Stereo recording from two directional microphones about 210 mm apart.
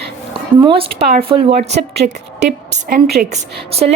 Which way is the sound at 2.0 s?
40° right (ahead or behind).